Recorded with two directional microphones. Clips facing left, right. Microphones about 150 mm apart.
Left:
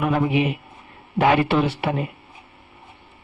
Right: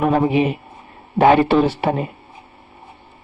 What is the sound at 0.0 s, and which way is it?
Speech, 35° right (ahead or behind).